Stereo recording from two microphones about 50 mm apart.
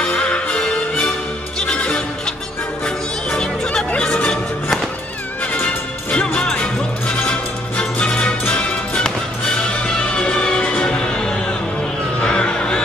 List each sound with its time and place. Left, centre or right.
0.0 s music: left
3.3 s music: centre
5.5 s music: left